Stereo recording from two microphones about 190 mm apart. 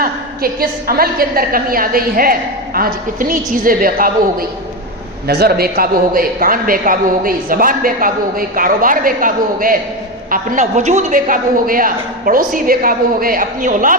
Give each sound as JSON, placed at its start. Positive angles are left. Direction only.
{"t": 0.0, "sound": "a woman's voice", "side_deg": -50}